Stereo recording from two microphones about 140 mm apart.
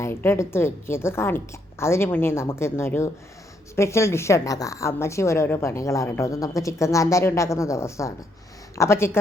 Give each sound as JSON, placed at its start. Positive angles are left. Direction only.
{"t": 0.0, "sound": "a woman's voice", "side_deg": 15}